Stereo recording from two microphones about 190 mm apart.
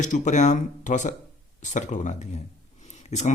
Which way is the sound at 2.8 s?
35° left (ahead or behind).